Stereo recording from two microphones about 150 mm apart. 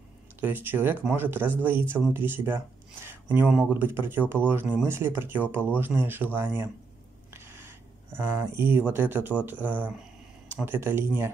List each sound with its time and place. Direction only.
0.4 s speech: 15° right (ahead or behind)